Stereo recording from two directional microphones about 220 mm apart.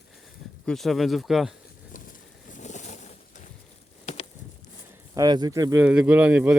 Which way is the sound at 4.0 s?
30° left (ahead or behind).